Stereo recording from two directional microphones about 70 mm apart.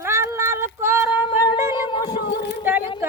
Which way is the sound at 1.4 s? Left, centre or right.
Left.